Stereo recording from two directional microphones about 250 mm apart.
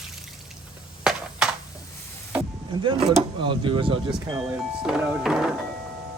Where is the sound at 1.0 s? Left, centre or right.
Centre.